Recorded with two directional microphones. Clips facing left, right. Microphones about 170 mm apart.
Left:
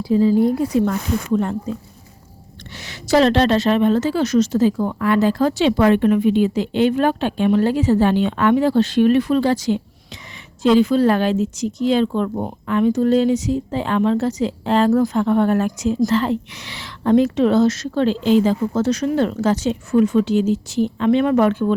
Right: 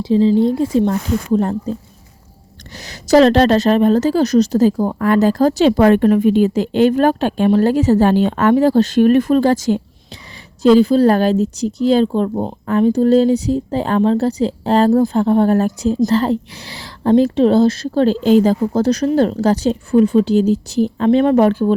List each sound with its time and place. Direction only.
0.0 s speech: 25° right (ahead or behind)
2.7 s a woman's voice: 40° right (ahead or behind)
12.6 s a woman's voice: 40° right (ahead or behind)